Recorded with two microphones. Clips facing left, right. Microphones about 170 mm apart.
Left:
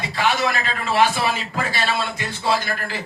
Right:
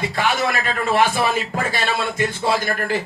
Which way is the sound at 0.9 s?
50° right (ahead or behind).